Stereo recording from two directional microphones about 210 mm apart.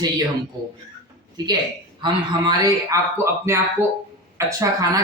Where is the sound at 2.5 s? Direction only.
15° right (ahead or behind).